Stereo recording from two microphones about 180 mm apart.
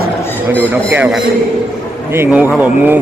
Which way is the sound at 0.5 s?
10° right (ahead or behind).